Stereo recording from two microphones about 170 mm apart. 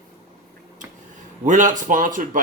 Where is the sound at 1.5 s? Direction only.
50° right (ahead or behind).